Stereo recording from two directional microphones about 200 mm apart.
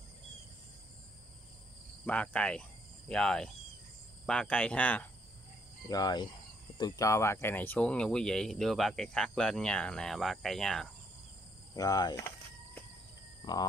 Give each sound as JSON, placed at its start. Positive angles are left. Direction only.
{"t": 2.0, "sound": "speech", "side_deg": 5}
{"t": 5.9, "sound": "speech", "side_deg": 20}
{"t": 11.7, "sound": "speech", "side_deg": 20}
{"t": 13.4, "sound": "a sound", "side_deg": 20}